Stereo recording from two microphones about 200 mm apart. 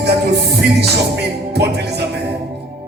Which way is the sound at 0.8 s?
55° right (ahead or behind).